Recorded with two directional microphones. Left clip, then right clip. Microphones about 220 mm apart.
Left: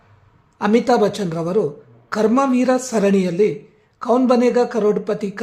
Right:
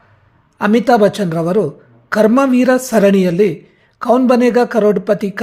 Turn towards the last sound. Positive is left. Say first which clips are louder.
# right 5 dB
turn(degrees=-15)  # may be behind; listen again after turning